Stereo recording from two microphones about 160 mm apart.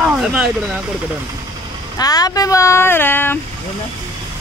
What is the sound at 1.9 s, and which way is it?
Speech, 25° left (ahead or behind).